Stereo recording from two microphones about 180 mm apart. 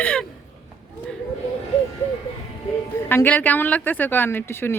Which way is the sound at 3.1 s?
10° left (ahead or behind).